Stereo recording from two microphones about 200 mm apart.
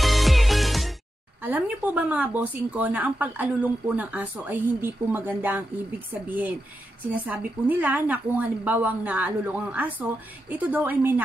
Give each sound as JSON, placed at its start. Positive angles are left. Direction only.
{"t": 0.0, "sound": "music", "side_deg": 0}
{"t": 1.4, "sound": "a woman's voice", "side_deg": -10}